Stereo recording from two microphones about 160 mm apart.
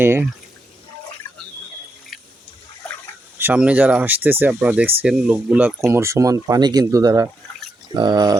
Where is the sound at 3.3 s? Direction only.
10° right (ahead or behind).